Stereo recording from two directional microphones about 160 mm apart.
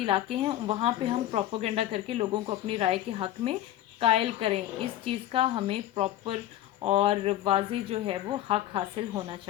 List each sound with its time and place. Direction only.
0.0 s speech: 35° right (ahead or behind)